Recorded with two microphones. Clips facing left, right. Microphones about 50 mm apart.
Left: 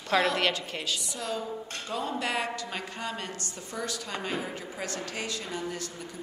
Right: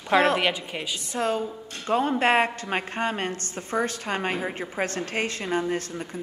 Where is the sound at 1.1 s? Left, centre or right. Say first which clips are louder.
Right 7 dB; right.